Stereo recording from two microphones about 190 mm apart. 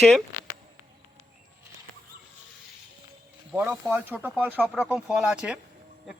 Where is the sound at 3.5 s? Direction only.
5° right (ahead or behind).